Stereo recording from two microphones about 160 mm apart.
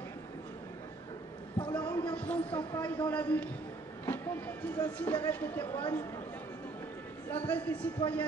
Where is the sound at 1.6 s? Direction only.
10° left (ahead or behind).